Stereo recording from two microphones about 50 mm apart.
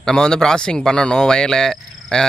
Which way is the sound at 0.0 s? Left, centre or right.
Centre.